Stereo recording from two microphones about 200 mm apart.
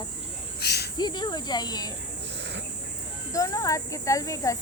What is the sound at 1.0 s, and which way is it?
Speech, 20° left (ahead or behind).